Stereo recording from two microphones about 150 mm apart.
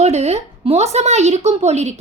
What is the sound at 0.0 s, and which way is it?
A child's voice, 45° right (ahead or behind).